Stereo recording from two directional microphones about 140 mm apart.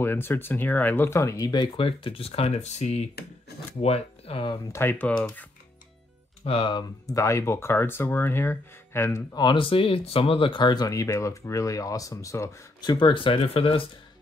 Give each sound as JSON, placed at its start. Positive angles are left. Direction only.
{"t": 0.0, "sound": "speech", "side_deg": 15}
{"t": 4.7, "sound": "speech", "side_deg": 15}
{"t": 6.4, "sound": "speech", "side_deg": 40}
{"t": 9.3, "sound": "speech", "side_deg": 30}
{"t": 12.9, "sound": "speech", "side_deg": 35}